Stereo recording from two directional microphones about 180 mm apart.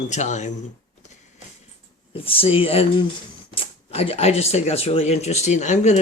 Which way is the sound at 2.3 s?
30° left (ahead or behind).